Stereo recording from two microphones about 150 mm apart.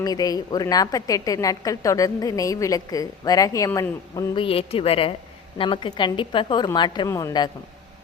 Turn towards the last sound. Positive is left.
turn(degrees=25)  # may be behind; listen again after turning